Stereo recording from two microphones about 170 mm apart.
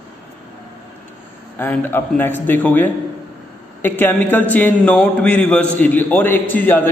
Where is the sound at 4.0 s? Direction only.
10° left (ahead or behind).